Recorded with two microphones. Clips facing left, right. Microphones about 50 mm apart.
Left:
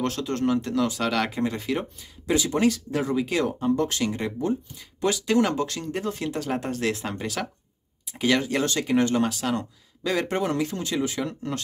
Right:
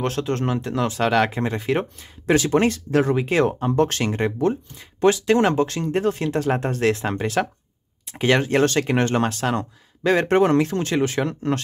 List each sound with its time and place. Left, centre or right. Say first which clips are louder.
0.0 s speech: right 2 dB; right
1.7 s speech: right 5 dB; right
4.7 s speech: right 8 dB; right